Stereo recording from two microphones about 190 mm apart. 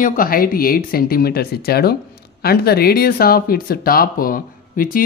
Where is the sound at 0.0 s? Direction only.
45° left (ahead or behind).